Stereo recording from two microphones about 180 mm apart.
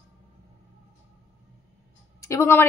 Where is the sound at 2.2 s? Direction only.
15° left (ahead or behind).